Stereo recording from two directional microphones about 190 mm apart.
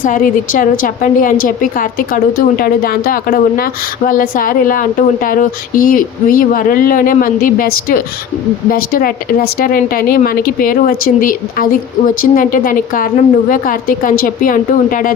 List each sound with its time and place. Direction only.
0.0 s a woman's voice: 45° left (ahead or behind)